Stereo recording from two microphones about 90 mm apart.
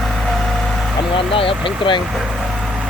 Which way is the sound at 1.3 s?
80° left.